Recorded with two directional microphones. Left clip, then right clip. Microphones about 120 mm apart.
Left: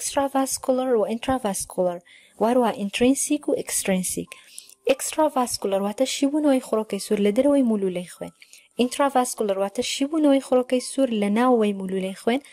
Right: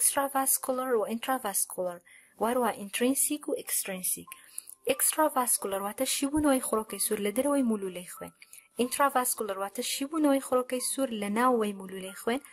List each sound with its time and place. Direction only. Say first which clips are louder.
0.1 s speech: left 7 dB; 30° left (ahead or behind)
3.5 s speech: left 10 dB; 55° left (ahead or behind)
4.8 s speech: left 6 dB; 30° left (ahead or behind)